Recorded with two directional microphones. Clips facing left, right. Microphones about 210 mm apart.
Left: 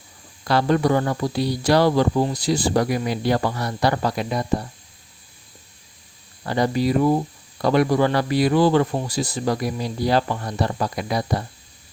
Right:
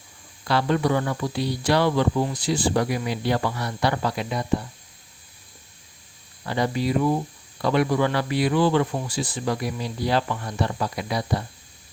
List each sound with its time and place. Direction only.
0.4 s speech: 40° left (ahead or behind)
6.4 s speech: 40° left (ahead or behind)